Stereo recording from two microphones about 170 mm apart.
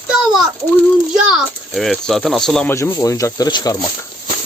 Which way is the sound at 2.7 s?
20° left (ahead or behind).